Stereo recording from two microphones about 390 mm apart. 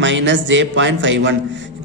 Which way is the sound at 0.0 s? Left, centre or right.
Right.